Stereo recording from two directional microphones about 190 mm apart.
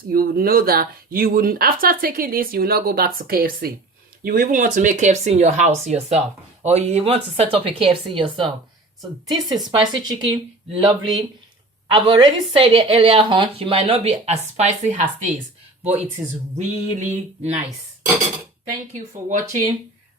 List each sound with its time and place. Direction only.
0.1 s a woman's voice: 50° right (ahead or behind)
18.7 s speech: 40° right (ahead or behind)